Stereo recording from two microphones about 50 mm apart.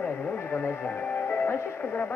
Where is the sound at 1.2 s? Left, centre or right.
Left.